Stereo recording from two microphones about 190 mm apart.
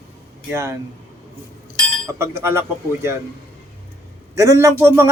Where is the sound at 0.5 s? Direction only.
15° right (ahead or behind).